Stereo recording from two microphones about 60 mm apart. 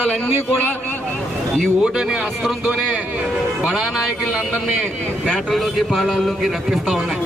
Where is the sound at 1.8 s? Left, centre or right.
Centre.